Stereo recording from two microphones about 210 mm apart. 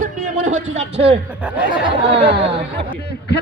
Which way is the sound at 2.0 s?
25° right (ahead or behind).